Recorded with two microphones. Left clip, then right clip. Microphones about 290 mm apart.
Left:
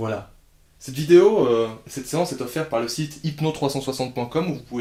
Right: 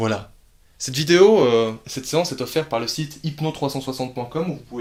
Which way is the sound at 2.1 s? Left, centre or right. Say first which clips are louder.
Right 3 dB; right.